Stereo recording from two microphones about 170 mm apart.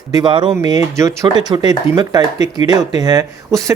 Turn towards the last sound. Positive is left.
turn(degrees=-20)  # may be behind; listen again after turning